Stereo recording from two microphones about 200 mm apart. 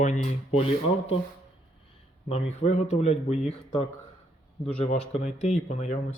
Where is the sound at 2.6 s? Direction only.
35° left (ahead or behind).